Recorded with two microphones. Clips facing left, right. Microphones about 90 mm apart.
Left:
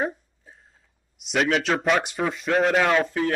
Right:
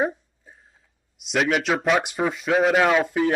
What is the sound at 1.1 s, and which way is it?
Speech, centre (ahead or behind).